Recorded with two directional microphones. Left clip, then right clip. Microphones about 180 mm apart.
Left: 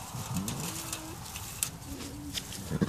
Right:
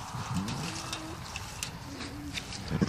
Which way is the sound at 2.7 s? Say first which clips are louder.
Right 1 dB; 15° left (ahead or behind).